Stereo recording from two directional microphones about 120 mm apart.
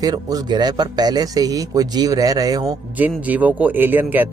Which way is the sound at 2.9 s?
15° right (ahead or behind).